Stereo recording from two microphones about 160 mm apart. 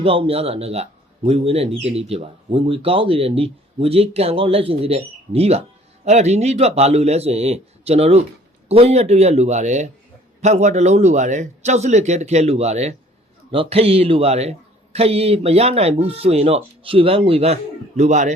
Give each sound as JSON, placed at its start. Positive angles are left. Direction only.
{"t": 0.0, "sound": "speech", "side_deg": -35}